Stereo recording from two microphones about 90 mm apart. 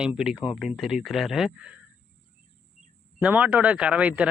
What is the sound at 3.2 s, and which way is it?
Speech, 15° right (ahead or behind).